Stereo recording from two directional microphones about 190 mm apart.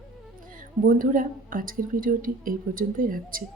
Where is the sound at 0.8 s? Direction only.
45° right (ahead or behind).